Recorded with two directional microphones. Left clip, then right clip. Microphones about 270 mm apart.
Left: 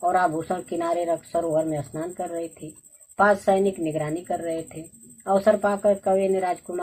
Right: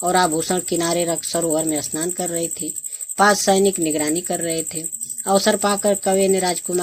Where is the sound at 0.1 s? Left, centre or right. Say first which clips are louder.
Right 7 dB; right.